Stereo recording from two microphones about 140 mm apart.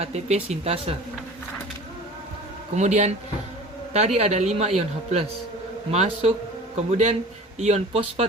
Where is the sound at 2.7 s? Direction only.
55° right (ahead or behind).